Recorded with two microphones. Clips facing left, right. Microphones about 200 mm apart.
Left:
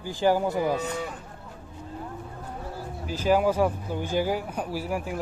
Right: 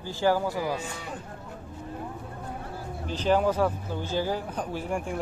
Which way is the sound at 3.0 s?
10° left (ahead or behind).